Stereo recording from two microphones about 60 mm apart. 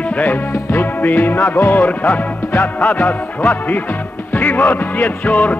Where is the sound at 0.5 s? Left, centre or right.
Left.